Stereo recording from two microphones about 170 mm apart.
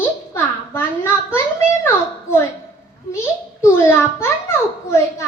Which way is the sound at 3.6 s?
15° left (ahead or behind).